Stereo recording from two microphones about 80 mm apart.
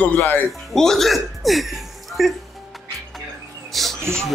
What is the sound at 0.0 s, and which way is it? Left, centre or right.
Speech, left.